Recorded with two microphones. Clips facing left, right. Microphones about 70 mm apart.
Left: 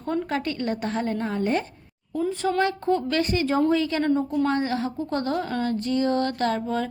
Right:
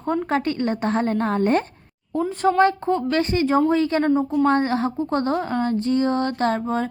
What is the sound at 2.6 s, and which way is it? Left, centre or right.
A woman's voice, right.